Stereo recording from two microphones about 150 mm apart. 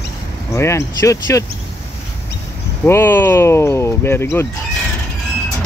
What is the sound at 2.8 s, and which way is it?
Speech, 15° left (ahead or behind).